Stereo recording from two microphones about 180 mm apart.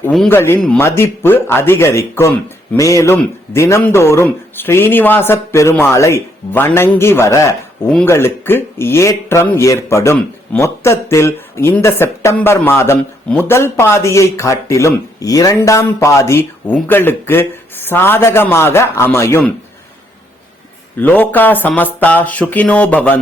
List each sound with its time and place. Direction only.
0.3 s speech: 15° left (ahead or behind)
21.0 s speech: 10° left (ahead or behind)